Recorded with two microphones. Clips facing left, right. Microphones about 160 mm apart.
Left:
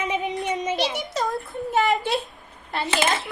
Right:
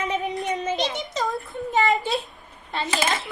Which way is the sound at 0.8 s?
Centre (ahead or behind).